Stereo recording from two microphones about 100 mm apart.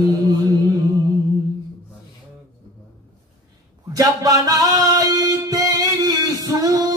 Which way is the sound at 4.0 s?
35° right (ahead or behind).